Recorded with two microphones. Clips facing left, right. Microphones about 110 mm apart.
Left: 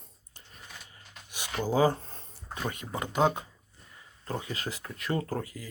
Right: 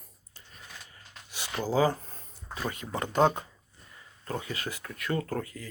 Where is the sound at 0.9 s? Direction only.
15° left (ahead or behind).